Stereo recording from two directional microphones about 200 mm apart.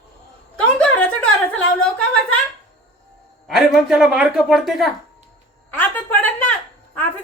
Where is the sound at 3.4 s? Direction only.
Centre (ahead or behind).